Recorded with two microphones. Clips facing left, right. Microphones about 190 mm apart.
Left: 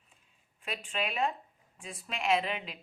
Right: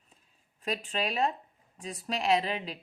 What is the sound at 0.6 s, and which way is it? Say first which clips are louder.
Speech: right 4 dB; 35° right (ahead or behind).